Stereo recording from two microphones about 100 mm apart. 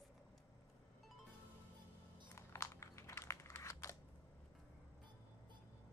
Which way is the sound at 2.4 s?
30° left (ahead or behind).